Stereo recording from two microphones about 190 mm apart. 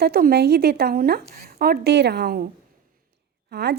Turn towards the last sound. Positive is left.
turn(degrees=-60)  # may be behind; listen again after turning